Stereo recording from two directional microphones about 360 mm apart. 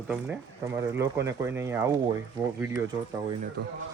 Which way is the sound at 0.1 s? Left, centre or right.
Centre.